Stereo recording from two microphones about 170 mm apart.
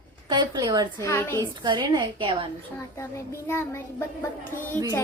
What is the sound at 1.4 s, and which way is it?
A woman's voice, 25° right (ahead or behind).